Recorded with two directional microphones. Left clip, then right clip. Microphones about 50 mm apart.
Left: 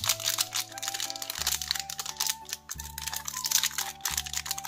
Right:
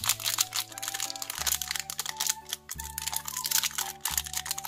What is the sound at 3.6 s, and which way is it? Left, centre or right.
Music, right.